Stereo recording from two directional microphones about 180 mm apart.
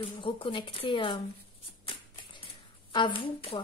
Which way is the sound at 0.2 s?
30° left (ahead or behind).